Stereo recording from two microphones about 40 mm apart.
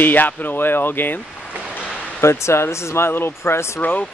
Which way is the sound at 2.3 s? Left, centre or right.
Left.